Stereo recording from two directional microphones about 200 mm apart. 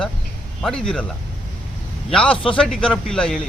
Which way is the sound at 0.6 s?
5° left (ahead or behind).